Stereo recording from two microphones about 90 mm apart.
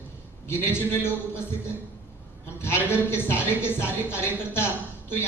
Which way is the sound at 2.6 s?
25° left (ahead or behind).